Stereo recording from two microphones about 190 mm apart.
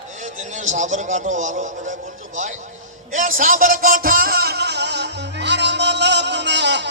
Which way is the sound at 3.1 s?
45° right (ahead or behind).